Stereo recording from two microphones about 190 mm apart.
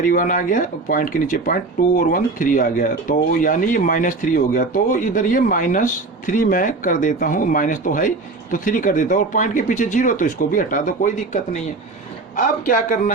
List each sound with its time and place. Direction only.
0.0 s speech: 45° left (ahead or behind)